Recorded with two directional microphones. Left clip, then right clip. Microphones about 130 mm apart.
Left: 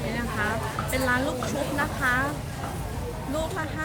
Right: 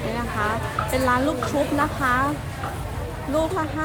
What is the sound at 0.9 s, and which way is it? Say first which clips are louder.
Speech: right 4 dB; 15° right (ahead or behind).